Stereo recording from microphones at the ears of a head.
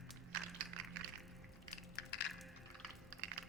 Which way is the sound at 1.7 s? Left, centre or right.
Left.